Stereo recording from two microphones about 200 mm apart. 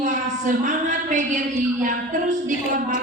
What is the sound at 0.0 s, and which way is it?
A woman's voice, 40° right (ahead or behind).